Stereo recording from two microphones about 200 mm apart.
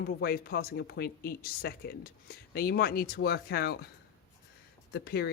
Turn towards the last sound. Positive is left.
turn(degrees=55)  # may be behind; listen again after turning